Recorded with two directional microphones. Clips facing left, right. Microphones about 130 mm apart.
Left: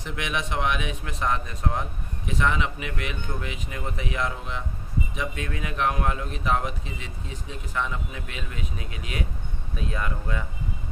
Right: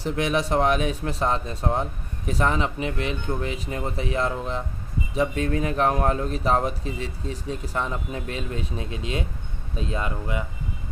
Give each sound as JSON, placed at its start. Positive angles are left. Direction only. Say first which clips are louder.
{"t": 0.0, "sound": "speech", "louder": "right 7 dB", "side_deg": -35}